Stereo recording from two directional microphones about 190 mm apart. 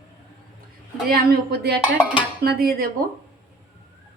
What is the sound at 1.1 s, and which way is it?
A woman's voice, 55° right (ahead or behind).